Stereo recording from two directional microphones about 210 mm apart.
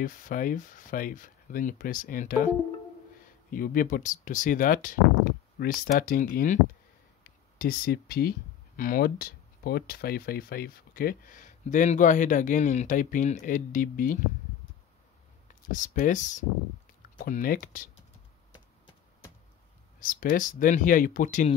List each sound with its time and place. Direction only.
0.0 s speech: 40° left (ahead or behind)
15.7 s speech: 40° left (ahead or behind)
18.5 s a sound: 20° left (ahead or behind)
20.0 s speech: 40° left (ahead or behind)